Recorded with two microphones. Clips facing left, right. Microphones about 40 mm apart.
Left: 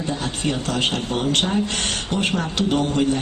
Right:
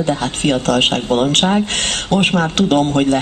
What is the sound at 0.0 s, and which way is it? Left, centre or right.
A man's voice, right.